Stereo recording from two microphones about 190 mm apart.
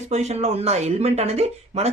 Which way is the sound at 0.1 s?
35° right (ahead or behind).